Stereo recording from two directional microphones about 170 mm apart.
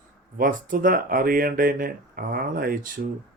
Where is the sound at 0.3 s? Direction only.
55° right (ahead or behind).